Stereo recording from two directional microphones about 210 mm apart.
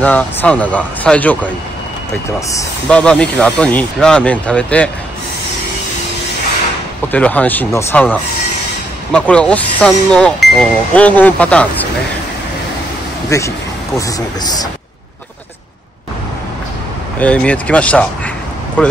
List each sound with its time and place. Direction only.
0.0 s speech: 5° left (ahead or behind)
2.9 s speech: 5° left (ahead or behind)
7.1 s speech: 5° left (ahead or behind)
13.3 s speech: 15° left (ahead or behind)
17.2 s speech: 5° left (ahead or behind)